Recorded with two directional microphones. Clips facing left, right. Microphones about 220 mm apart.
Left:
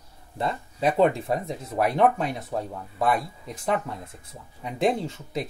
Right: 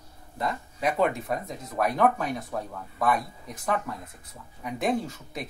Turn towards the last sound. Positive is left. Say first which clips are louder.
# left 1 dB
turn(degrees=25)  # may be behind; listen again after turning